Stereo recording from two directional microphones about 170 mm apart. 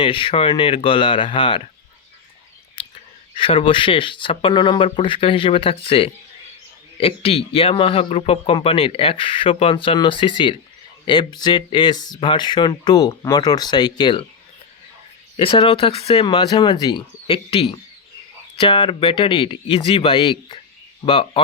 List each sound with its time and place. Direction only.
0.0 s a man's voice: 30° left (ahead or behind)
2.7 s a man's voice: 30° left (ahead or behind)
15.4 s a man's voice: 30° left (ahead or behind)